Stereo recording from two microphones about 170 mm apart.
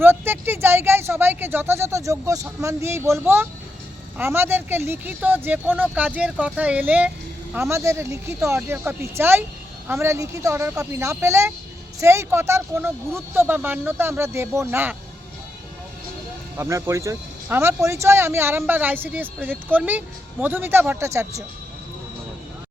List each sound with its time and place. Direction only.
0.0 s a woman's voice: 10° right (ahead or behind)
16.6 s a woman's voice: 15° right (ahead or behind)